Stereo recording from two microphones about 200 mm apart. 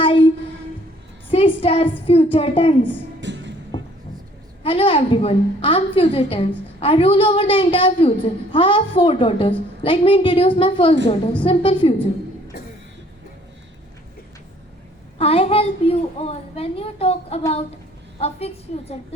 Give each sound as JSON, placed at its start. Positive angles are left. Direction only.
{"t": 0.0, "sound": "a sound", "side_deg": 25}
{"t": 1.3, "sound": "a woman's voice", "side_deg": 25}
{"t": 3.2, "sound": "music", "side_deg": -60}
{"t": 4.6, "sound": "a woman's voice", "side_deg": 25}
{"t": 12.5, "sound": "cough", "side_deg": 50}
{"t": 15.2, "sound": "a woman's voice", "side_deg": 30}